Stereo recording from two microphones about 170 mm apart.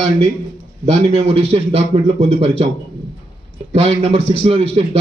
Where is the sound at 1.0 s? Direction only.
35° right (ahead or behind).